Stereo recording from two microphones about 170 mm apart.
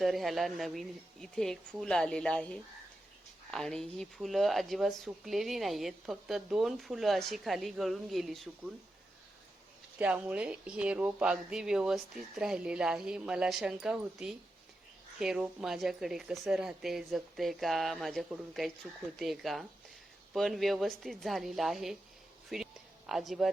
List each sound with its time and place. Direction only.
0.0 s speech: centre (ahead or behind)
10.0 s speech: 10° right (ahead or behind)
22.4 s a sound: centre (ahead or behind)